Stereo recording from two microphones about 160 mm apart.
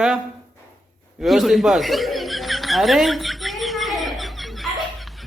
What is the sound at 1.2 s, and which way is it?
Chuckle, centre (ahead or behind).